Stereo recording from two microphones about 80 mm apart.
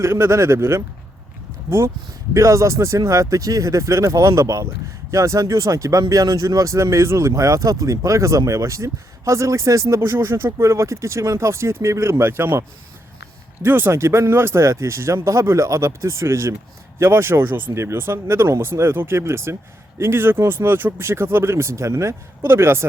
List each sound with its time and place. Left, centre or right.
0.0 s speech: right
2.3 s speech: right